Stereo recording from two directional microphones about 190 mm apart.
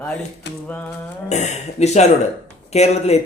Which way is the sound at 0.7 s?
5° left (ahead or behind).